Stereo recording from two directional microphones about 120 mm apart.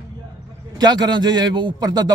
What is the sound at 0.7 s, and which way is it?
A man's voice, 35° right (ahead or behind).